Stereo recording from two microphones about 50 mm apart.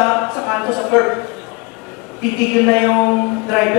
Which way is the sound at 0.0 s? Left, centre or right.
Centre.